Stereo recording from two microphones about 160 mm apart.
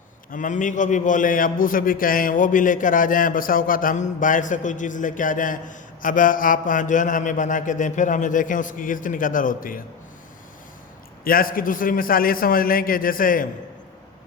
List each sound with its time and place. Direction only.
0.3 s a man's voice: 55° left (ahead or behind)
11.2 s a man's voice: 65° left (ahead or behind)